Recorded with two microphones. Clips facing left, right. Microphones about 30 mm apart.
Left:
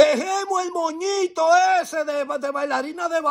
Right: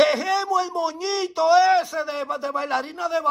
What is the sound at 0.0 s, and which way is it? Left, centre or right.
Speech, right.